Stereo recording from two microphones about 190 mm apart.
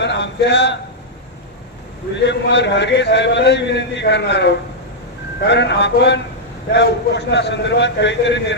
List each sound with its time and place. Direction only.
0.0 s speech: 65° left (ahead or behind)
2.1 s a man's voice: 65° left (ahead or behind)